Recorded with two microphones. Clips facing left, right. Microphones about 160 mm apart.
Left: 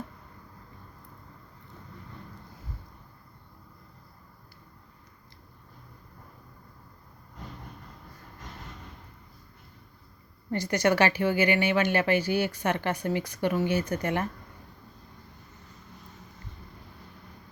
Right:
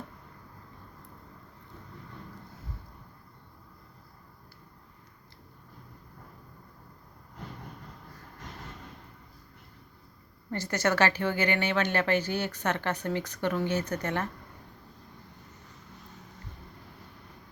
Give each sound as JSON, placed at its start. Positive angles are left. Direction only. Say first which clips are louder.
{"t": 10.5, "sound": "speech", "louder": "left 4 dB", "side_deg": 15}